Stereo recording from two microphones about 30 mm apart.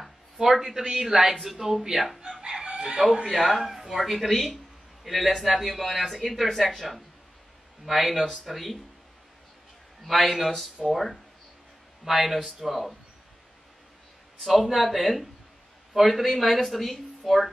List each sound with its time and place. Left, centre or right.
0.5 s speech: centre
2.6 s chicken: right
3.3 s speech: centre
10.0 s speech: centre
14.4 s speech: centre